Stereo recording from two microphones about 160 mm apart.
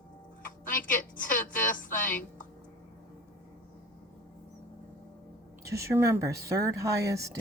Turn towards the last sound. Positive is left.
turn(degrees=-20)  # may be behind; listen again after turning